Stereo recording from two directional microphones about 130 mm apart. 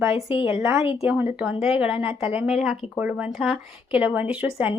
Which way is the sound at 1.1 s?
10° right (ahead or behind).